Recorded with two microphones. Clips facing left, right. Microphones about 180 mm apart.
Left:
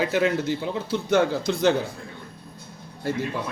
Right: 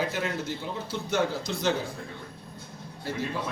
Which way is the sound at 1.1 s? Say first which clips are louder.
Left 7 dB; 60° left (ahead or behind).